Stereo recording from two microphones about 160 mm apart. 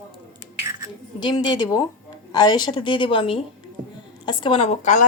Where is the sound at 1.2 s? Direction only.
25° left (ahead or behind).